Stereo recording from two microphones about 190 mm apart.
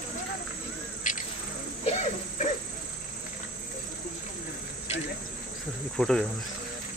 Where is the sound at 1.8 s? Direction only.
35° left (ahead or behind).